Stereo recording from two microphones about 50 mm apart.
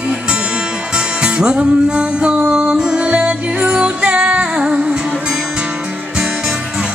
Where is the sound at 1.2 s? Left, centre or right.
Centre.